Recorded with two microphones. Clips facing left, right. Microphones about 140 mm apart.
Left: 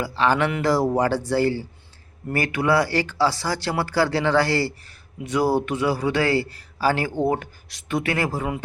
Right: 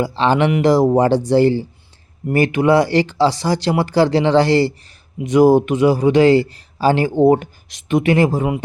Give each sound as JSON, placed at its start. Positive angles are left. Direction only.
{"t": 0.0, "sound": "speech", "side_deg": -25}